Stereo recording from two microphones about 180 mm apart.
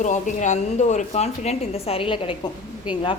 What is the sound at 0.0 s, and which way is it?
A woman's voice, 40° left (ahead or behind).